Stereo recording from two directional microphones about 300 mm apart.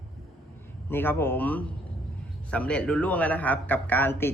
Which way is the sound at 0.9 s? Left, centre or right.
Centre.